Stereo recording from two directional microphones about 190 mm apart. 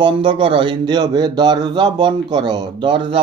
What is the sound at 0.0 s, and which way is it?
Speech, 25° right (ahead or behind).